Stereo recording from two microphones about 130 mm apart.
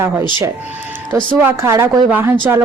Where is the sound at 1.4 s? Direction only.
20° right (ahead or behind).